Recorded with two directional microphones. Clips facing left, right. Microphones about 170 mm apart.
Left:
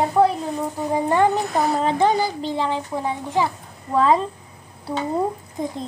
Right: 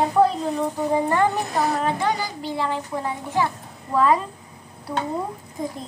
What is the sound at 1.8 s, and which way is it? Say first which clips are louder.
Speech: left 5 dB; 25° left (ahead or behind).